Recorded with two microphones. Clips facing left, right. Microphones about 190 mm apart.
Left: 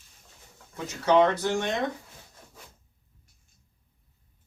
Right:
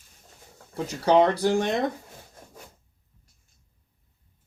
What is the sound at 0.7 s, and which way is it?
Speech, 35° right (ahead or behind).